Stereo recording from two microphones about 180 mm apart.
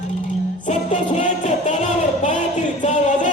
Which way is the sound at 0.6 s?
40° left (ahead or behind).